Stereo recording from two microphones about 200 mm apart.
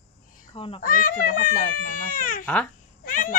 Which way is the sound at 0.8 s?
45° left (ahead or behind).